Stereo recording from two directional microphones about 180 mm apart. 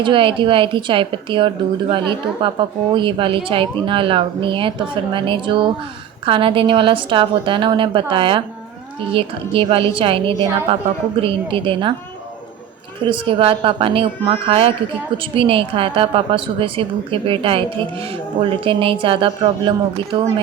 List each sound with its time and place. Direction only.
0.0 s a woman's voice: 30° right (ahead or behind)
13.1 s a woman's voice: 25° right (ahead or behind)